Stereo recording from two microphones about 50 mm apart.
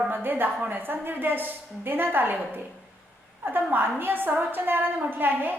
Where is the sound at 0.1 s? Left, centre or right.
Right.